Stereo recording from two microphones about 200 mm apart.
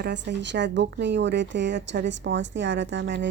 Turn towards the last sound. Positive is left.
turn(degrees=-60)  # may be behind; listen again after turning